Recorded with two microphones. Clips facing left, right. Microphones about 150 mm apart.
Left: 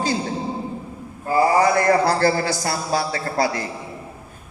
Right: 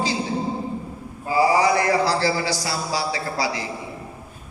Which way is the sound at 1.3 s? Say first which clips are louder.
Left 1 dB; 50° left (ahead or behind).